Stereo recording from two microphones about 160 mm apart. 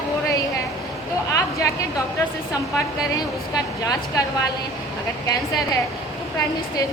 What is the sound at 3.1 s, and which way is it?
A woman's voice, 20° left (ahead or behind).